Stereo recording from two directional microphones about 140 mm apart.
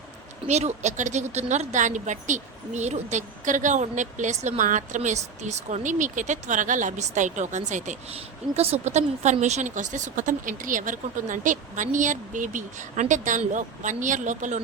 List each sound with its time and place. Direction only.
0.4 s speech: 55° right (ahead or behind)
8.5 s speech: 50° right (ahead or behind)